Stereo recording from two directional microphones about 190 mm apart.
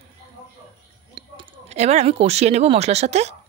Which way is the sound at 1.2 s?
30° right (ahead or behind).